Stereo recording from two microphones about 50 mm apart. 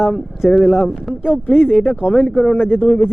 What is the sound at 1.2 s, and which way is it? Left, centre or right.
Speech, left.